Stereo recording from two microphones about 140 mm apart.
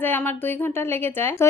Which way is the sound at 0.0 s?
15° left (ahead or behind).